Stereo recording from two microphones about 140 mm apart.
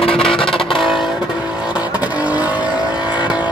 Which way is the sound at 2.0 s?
10° right (ahead or behind).